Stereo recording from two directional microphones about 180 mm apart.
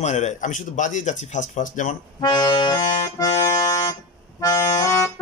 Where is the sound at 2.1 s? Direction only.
25° left (ahead or behind).